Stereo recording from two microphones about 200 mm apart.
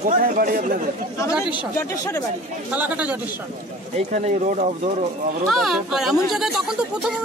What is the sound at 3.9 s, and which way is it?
Speech, 35° right (ahead or behind).